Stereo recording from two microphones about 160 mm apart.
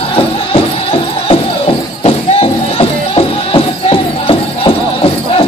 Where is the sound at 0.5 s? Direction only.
35° left (ahead or behind).